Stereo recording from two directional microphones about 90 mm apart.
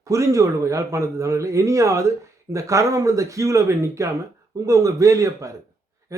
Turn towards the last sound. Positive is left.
turn(degrees=-35)  # may be behind; listen again after turning